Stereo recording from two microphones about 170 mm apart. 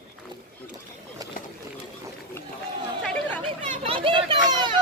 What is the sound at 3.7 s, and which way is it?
Children playing, 35° right (ahead or behind).